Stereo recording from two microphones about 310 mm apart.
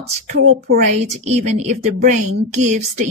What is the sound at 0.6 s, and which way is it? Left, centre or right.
A woman's voice, right.